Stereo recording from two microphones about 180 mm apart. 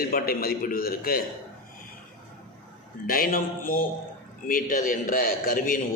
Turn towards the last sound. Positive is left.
turn(degrees=50)  # may be behind; listen again after turning